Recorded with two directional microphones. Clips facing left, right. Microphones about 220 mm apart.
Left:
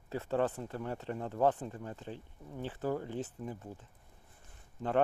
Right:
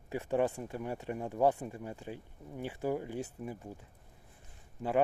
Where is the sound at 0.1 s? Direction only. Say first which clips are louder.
Right 1 dB; 15° right (ahead or behind).